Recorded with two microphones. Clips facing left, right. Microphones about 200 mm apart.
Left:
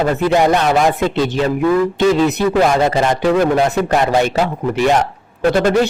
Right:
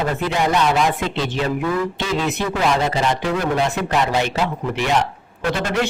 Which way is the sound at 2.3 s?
45° left (ahead or behind).